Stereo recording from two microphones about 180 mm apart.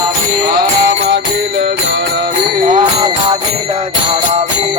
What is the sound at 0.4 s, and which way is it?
Music, 65° right (ahead or behind).